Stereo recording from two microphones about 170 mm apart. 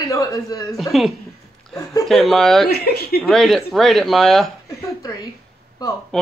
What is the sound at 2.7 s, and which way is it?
Speech, 70° left (ahead or behind).